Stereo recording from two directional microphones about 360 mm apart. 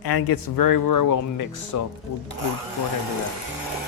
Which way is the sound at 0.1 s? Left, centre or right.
Left.